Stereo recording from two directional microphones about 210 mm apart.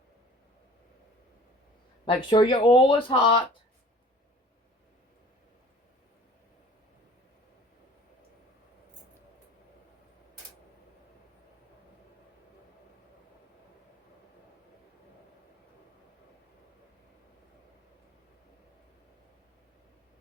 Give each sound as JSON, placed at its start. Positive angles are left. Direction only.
{"t": 2.0, "sound": "speech", "side_deg": 25}